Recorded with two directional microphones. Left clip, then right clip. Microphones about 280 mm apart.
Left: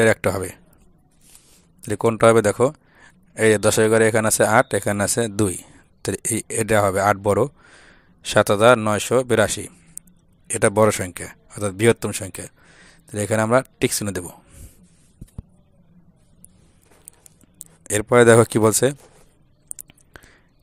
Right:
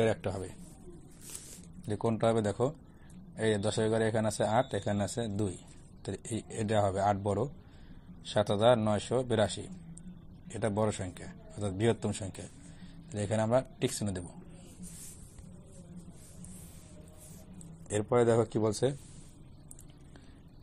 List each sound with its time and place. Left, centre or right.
0.0 s speech: left
1.8 s speech: left
17.8 s speech: left